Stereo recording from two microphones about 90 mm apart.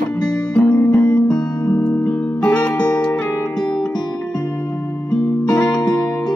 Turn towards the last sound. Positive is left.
turn(degrees=10)  # may be behind; listen again after turning